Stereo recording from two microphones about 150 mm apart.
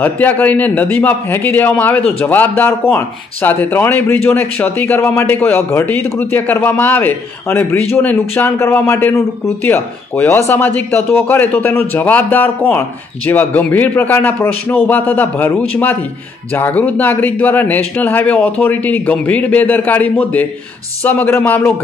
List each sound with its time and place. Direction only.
0.0 s a man's voice: 10° left (ahead or behind)